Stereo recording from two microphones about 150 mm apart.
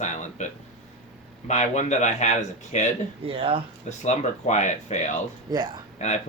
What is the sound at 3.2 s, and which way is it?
Speech, 40° right (ahead or behind).